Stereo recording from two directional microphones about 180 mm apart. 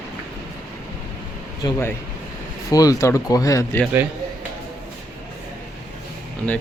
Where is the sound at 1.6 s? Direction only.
15° left (ahead or behind).